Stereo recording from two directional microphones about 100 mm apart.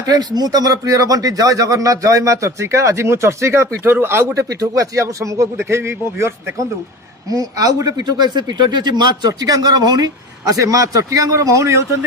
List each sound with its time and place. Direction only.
0.1 s speech: 40° right (ahead or behind)